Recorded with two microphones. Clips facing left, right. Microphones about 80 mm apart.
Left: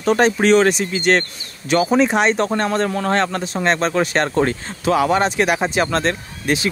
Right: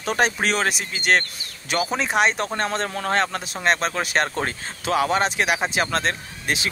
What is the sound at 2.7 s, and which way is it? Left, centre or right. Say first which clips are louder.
Speech: left 6 dB; left.